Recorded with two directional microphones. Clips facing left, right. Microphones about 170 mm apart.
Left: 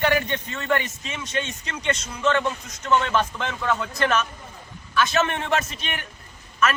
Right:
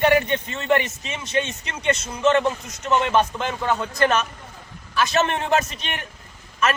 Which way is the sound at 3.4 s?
35° right (ahead or behind).